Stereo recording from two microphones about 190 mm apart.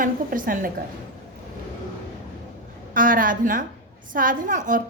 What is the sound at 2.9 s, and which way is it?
A woman's voice, 45° right (ahead or behind).